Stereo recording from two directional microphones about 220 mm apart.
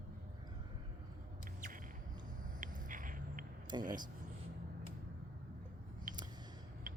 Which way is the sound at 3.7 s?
20° right (ahead or behind).